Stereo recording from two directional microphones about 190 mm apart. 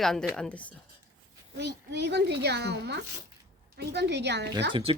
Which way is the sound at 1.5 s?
60° right (ahead or behind).